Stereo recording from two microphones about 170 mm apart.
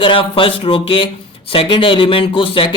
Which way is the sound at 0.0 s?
30° left (ahead or behind).